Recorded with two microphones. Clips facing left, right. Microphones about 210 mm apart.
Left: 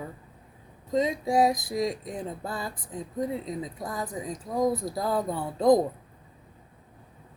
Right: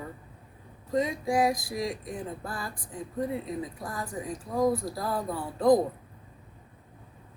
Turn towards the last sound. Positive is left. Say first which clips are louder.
# left 1 dB
turn(degrees=20)  # may be behind; listen again after turning